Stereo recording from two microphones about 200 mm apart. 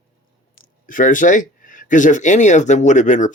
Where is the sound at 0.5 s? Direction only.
40° left (ahead or behind).